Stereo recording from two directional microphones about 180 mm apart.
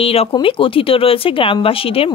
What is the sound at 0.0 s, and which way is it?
Speech, 30° left (ahead or behind).